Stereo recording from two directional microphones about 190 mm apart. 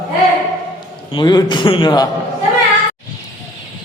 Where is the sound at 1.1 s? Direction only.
25° left (ahead or behind).